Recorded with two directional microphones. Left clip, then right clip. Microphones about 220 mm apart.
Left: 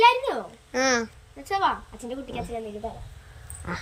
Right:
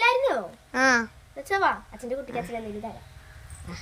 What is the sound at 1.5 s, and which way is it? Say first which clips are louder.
Speech: even; 20° right (ahead or behind).